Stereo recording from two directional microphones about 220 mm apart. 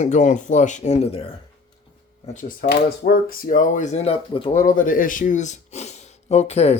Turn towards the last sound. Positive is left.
turn(degrees=30)  # may be behind; listen again after turning